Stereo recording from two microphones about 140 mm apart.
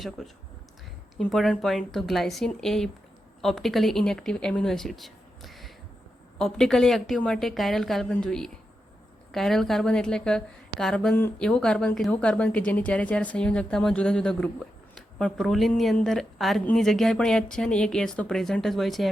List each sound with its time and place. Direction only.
0.2 s a woman's voice: centre (ahead or behind)